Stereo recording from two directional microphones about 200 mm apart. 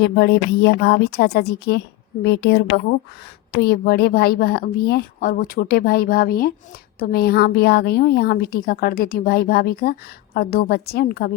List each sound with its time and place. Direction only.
0.0 s a woman's voice: 55° left (ahead or behind)